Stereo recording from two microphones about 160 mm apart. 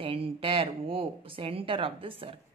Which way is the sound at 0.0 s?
35° right (ahead or behind).